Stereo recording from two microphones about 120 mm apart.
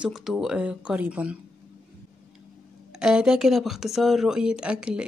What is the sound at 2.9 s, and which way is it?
Speech, 5° right (ahead or behind).